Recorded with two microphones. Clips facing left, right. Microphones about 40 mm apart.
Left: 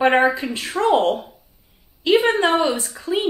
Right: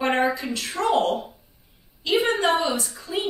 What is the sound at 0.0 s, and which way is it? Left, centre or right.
A woman's voice, left.